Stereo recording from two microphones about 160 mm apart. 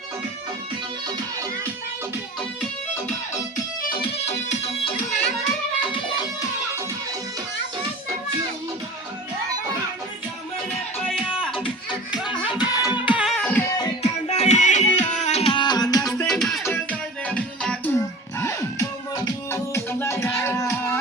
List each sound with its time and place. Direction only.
3.8 s music: 70° left (ahead or behind)
11.2 s music: 5° right (ahead or behind)
12.3 s music: 30° left (ahead or behind)
12.9 s music: 10° right (ahead or behind); by 13.7 s 10° left (ahead or behind)
14.0 s music: 45° left (ahead or behind); by 16.0 s 25° left (ahead or behind)
16.2 s music: centre (ahead or behind)
17.9 s music: 15° left (ahead or behind)